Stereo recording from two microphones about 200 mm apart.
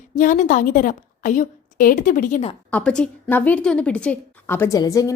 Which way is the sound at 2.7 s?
5° left (ahead or behind).